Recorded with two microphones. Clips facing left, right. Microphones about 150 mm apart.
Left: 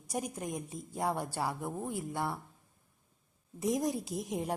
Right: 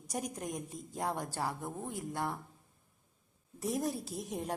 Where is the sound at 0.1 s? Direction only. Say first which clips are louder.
Left 2 dB; 5° left (ahead or behind).